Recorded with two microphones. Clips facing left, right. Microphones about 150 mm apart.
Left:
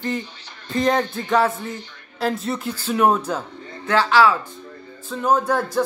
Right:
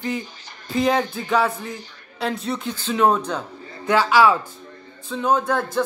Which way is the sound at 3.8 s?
15° right (ahead or behind).